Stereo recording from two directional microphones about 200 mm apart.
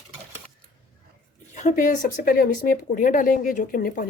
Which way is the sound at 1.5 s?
40° left (ahead or behind).